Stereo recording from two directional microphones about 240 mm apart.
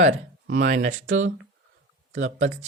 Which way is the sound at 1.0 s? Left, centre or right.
Right.